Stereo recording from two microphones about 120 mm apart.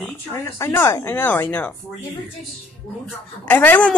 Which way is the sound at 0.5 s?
20° left (ahead or behind).